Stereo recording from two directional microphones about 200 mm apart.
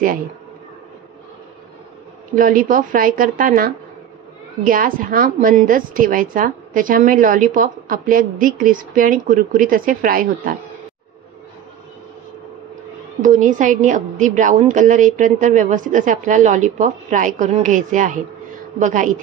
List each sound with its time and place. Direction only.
2.3 s a woman's voice: 45° right (ahead or behind)
13.2 s a woman's voice: 40° right (ahead or behind)